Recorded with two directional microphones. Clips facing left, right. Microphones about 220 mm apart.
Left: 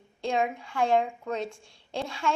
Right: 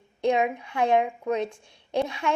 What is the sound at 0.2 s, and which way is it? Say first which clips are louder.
A woman's voice: right 5 dB; 20° right (ahead or behind).